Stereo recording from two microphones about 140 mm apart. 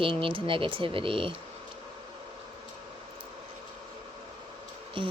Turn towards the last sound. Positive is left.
turn(degrees=-35)  # may be behind; listen again after turning